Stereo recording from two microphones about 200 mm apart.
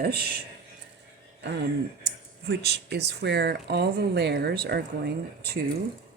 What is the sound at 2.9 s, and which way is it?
Speech, 55° right (ahead or behind).